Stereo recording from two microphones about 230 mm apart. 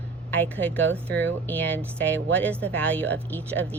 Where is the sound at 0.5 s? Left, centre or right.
Centre.